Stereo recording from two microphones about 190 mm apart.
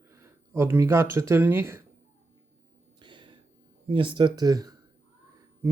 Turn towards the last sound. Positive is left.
turn(degrees=-20)  # may be behind; listen again after turning